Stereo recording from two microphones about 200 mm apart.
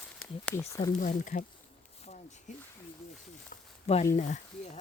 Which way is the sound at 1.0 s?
40° left (ahead or behind).